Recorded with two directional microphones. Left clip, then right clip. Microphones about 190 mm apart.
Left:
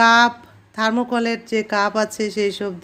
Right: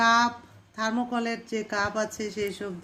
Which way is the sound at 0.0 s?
50° left (ahead or behind).